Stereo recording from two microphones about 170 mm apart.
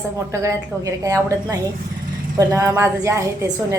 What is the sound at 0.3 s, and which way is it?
A woman's voice, 15° right (ahead or behind).